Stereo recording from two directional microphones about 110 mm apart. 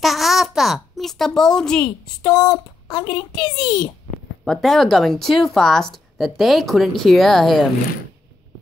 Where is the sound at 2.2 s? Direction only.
35° left (ahead or behind).